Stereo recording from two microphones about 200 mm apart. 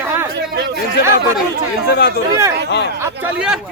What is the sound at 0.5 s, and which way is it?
Speech, 55° right (ahead or behind).